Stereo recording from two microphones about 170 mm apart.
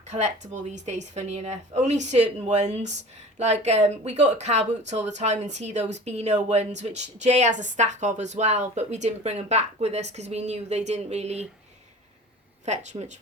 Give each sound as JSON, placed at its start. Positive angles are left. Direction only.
{"t": 0.1, "sound": "a woman's voice", "side_deg": -45}
{"t": 12.6, "sound": "a woman's voice", "side_deg": -40}